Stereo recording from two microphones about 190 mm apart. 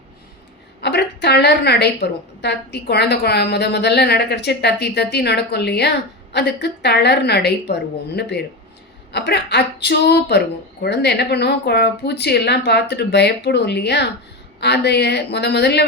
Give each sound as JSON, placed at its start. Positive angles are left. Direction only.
{"t": 0.8, "sound": "a woman's voice", "side_deg": 60}